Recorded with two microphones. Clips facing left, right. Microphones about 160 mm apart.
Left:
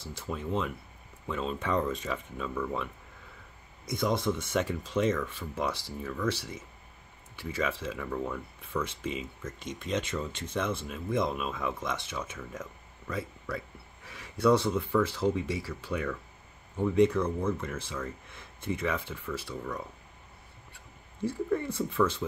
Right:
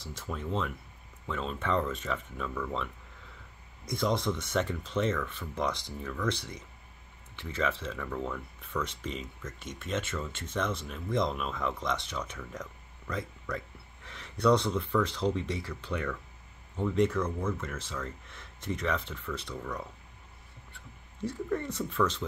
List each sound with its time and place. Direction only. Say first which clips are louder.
0.2 s speech: left 2 dB; 15° left (ahead or behind)
14.0 s a sound: left 1 dB; 10° left (ahead or behind)
15.0 s speech: left 2 dB; 5° left (ahead or behind)
21.2 s speech: left 3 dB; 10° left (ahead or behind)